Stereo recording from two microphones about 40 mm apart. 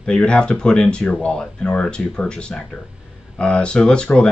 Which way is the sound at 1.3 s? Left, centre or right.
Left.